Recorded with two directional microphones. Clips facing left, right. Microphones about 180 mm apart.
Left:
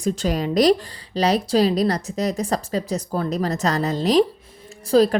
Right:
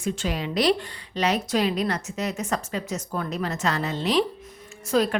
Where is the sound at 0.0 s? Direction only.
40° left (ahead or behind).